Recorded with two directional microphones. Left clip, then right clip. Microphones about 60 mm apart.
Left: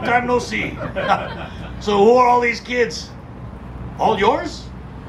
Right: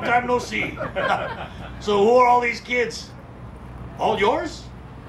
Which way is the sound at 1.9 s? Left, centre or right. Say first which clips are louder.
Left 3 dB; centre.